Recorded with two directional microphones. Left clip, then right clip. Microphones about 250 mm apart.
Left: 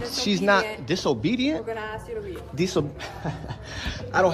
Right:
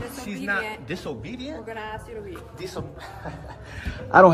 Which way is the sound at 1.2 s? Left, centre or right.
Left.